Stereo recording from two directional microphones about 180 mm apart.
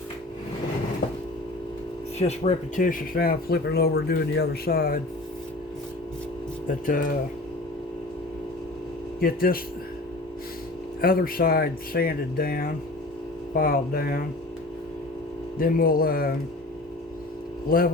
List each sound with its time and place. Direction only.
2.1 s speech: 35° left (ahead or behind); by 4.9 s 55° left (ahead or behind)
6.7 s speech: 50° left (ahead or behind)
9.2 s speech: 55° left (ahead or behind)
11.0 s speech: 55° left (ahead or behind)
15.5 s speech: 50° left (ahead or behind)
17.7 s speech: 55° left (ahead or behind)